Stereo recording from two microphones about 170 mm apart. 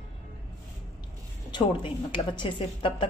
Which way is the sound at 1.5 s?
30° left (ahead or behind).